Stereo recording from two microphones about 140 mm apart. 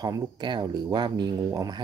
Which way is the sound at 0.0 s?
30° right (ahead or behind).